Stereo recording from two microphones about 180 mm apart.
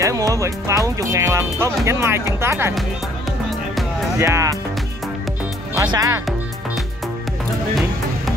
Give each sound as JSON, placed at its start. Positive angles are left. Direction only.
{"t": 0.0, "sound": "speech", "side_deg": -20}
{"t": 4.2, "sound": "speech", "side_deg": -15}
{"t": 5.8, "sound": "speech", "side_deg": -20}